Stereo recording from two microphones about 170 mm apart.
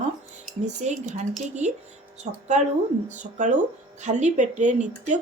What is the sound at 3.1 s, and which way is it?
Speech, 45° right (ahead or behind).